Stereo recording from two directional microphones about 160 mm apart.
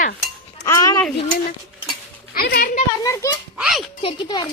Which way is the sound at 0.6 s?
20° left (ahead or behind).